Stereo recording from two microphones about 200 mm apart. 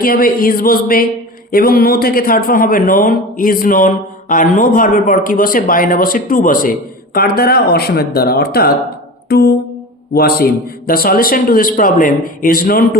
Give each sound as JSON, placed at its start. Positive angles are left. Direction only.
{"t": 0.0, "sound": "a man's voice", "side_deg": 45}